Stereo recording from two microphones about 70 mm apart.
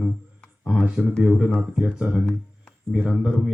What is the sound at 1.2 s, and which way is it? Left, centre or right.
Speech, centre.